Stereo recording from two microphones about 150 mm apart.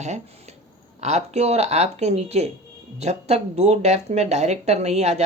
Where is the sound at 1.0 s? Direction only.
50° right (ahead or behind).